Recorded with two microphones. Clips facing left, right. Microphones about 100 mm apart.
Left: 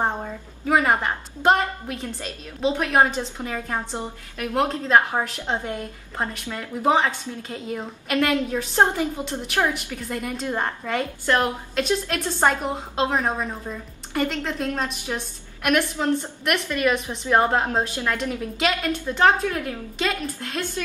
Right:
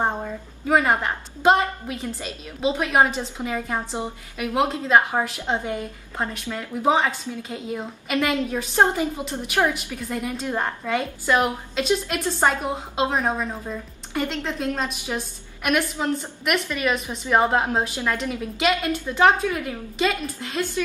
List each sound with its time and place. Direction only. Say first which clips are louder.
0.7 s a woman's voice: even; centre (ahead or behind)